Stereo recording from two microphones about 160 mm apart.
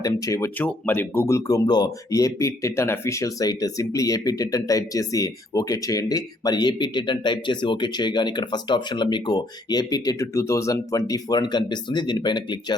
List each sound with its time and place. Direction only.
0.0 s speech: 20° left (ahead or behind)